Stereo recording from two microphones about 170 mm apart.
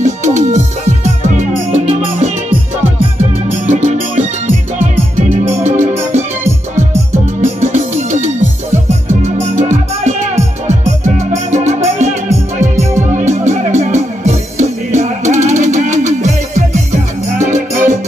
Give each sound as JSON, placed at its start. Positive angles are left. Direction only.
{"t": 0.0, "sound": "music", "side_deg": -45}
{"t": 3.7, "sound": "music", "side_deg": -40}
{"t": 5.4, "sound": "music", "side_deg": -40}
{"t": 7.6, "sound": "music", "side_deg": -45}